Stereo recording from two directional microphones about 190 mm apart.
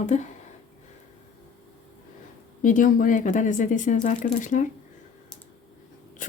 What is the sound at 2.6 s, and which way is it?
Speech, 45° left (ahead or behind).